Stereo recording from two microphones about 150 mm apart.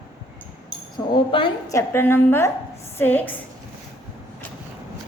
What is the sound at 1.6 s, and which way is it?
A woman's voice, 20° left (ahead or behind).